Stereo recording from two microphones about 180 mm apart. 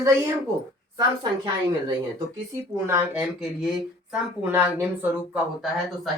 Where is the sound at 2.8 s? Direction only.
10° right (ahead or behind).